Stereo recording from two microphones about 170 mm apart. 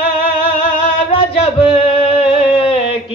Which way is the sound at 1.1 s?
35° left (ahead or behind).